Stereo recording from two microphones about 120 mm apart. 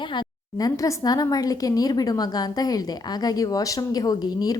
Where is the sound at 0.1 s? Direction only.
35° left (ahead or behind).